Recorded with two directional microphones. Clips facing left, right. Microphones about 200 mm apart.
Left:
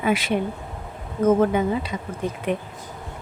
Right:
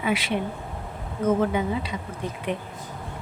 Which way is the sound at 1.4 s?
45° left (ahead or behind).